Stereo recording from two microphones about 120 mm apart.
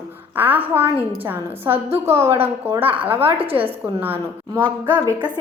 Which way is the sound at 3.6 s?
15° right (ahead or behind).